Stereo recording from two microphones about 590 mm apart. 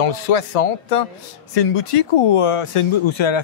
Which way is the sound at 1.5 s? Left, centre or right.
Left.